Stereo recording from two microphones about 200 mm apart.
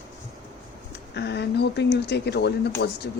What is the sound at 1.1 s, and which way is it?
A woman's voice, 60° left (ahead or behind).